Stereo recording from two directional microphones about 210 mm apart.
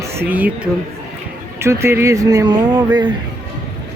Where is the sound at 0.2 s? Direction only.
10° right (ahead or behind).